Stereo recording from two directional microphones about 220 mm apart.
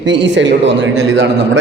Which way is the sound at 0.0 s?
55° right (ahead or behind).